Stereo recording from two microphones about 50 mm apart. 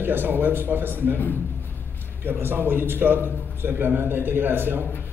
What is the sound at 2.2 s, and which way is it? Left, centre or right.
A man's voice, right.